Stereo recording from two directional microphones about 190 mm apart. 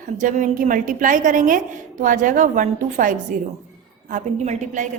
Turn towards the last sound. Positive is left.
turn(degrees=-40)  # may be behind; listen again after turning